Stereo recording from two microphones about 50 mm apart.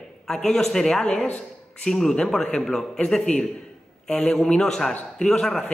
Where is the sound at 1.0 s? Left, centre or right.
Left.